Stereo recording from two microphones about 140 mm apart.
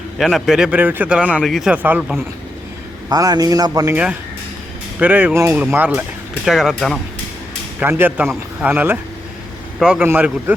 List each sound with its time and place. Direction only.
0.2 s speech: centre (ahead or behind)
3.1 s a man's voice: 30° right (ahead or behind)
4.9 s speech: 10° right (ahead or behind)
7.8 s speech: 15° right (ahead or behind)